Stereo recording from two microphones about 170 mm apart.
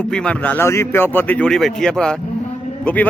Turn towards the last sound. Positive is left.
turn(degrees=10)  # may be behind; listen again after turning